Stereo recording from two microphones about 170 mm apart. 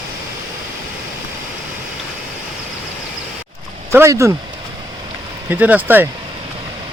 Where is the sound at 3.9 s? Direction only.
15° right (ahead or behind).